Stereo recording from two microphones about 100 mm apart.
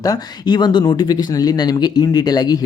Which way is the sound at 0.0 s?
40° left (ahead or behind).